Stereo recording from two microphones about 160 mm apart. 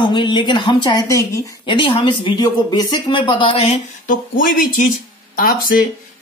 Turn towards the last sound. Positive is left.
turn(degrees=65)  # may be behind; listen again after turning